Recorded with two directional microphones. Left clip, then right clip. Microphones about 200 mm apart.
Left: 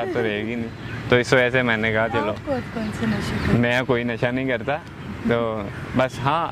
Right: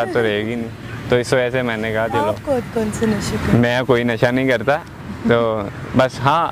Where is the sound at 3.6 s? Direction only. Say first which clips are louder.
Right 5 dB; 15° right (ahead or behind).